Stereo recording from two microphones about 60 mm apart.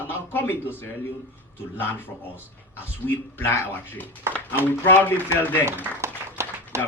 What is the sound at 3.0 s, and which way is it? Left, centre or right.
A man's voice, left.